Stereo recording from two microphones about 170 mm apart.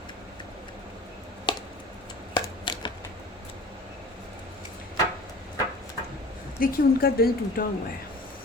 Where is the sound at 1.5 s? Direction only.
30° left (ahead or behind).